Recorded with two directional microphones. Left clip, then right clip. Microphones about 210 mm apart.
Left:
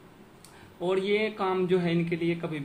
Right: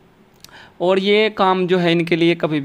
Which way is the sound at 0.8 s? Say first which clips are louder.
Right 12 dB; 55° right (ahead or behind).